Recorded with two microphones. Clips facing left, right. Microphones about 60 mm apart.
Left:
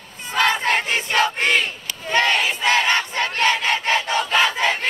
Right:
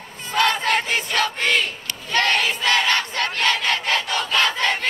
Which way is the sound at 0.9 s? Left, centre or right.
Left.